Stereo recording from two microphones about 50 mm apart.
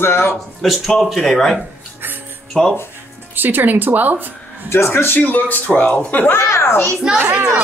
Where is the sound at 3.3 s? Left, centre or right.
Right.